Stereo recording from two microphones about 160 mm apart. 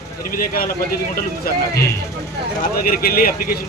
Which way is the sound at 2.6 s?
65° left (ahead or behind).